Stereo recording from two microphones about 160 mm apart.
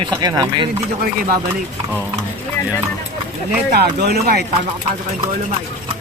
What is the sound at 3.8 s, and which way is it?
Speech, 80° right.